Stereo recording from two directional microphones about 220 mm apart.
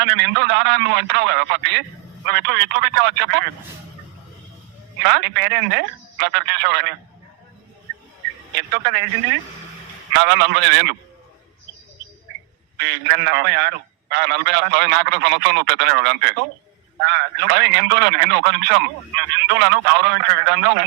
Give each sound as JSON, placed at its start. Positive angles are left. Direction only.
{"t": 0.0, "sound": "a man's voice", "side_deg": -50}
{"t": 5.0, "sound": "a man's voice", "side_deg": -50}
{"t": 8.5, "sound": "a man's voice", "side_deg": -50}
{"t": 10.2, "sound": "a man's voice", "side_deg": -50}
{"t": 12.8, "sound": "a man's voice", "side_deg": -50}